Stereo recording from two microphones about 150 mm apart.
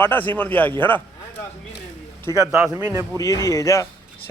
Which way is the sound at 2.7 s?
15° right (ahead or behind).